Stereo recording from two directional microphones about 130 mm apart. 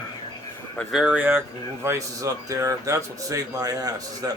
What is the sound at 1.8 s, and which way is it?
Speech, 25° right (ahead or behind).